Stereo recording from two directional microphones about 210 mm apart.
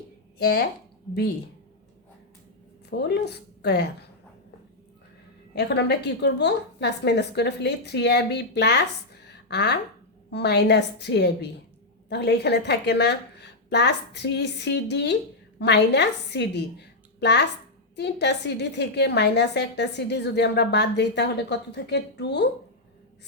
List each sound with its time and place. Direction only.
0.3 s speech: 45° left (ahead or behind)
3.2 s a woman's voice: 50° left (ahead or behind)
5.5 s a woman's voice: 55° left (ahead or behind)